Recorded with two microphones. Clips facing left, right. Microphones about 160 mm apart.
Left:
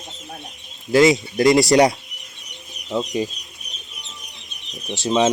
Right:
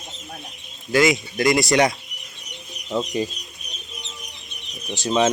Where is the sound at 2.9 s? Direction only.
10° left (ahead or behind).